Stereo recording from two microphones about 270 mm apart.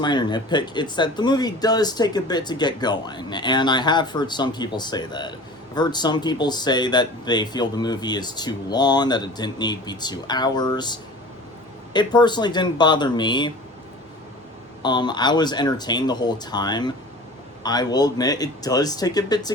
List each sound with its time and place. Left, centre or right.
0.0 s speech: centre
14.8 s speech: centre